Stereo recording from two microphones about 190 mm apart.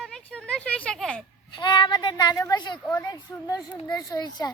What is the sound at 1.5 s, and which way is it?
Speech, 25° left (ahead or behind).